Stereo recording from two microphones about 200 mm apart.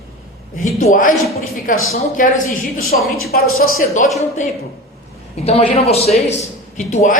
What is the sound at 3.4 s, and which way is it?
Speech, 90° left.